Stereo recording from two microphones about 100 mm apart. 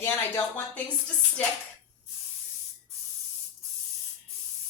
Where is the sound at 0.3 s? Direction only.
15° left (ahead or behind).